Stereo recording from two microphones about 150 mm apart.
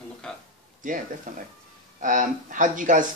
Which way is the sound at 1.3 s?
65° right (ahead or behind).